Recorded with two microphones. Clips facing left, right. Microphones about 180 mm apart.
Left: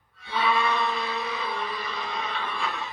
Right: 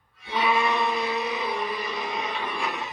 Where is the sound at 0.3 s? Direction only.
20° right (ahead or behind).